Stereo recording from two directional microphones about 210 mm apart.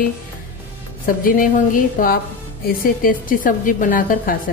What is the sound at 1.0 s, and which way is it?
A woman's voice, 40° left (ahead or behind).